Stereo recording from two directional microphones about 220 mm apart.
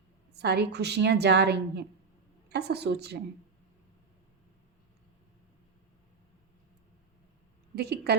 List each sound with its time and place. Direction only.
0.3 s a woman's voice: 50° right (ahead or behind)
7.8 s a woman's voice: 50° right (ahead or behind)